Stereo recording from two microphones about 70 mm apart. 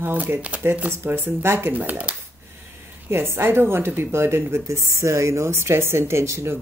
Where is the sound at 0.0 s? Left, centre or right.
Right.